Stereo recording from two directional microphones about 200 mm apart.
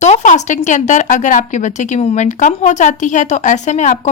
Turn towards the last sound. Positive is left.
turn(degrees=35)  # may be behind; listen again after turning